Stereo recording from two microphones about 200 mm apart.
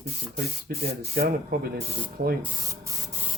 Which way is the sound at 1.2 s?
45° right (ahead or behind).